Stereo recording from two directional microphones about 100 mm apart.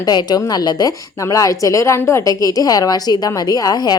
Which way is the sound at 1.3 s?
35° left (ahead or behind).